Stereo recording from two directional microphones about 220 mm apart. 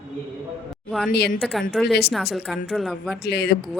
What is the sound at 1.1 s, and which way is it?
Speech, 50° left (ahead or behind).